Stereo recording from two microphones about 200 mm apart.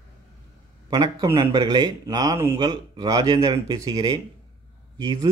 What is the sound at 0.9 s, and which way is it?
A man's voice, 20° right (ahead or behind).